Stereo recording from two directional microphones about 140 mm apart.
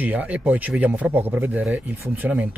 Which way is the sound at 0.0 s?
10° right (ahead or behind).